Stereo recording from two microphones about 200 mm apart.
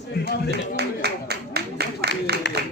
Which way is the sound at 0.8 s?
55° right (ahead or behind).